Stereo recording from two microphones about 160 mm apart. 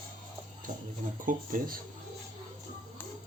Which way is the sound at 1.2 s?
60° right (ahead or behind).